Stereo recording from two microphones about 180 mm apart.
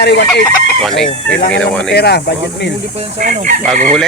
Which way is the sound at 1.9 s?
65° left (ahead or behind).